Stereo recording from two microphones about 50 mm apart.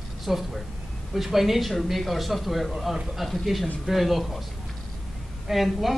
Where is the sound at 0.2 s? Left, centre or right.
Centre.